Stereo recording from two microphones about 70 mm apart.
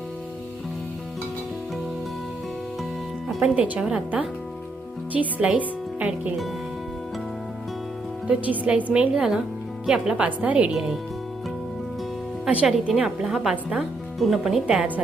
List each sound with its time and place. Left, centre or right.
3.2 s a woman's voice: centre
8.3 s a woman's voice: centre
12.6 s speech: centre
14.8 s speech: right